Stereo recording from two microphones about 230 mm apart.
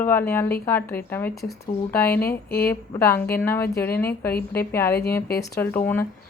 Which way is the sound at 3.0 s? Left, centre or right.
Centre.